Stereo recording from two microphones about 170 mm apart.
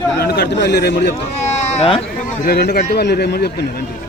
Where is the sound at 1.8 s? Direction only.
35° left (ahead or behind).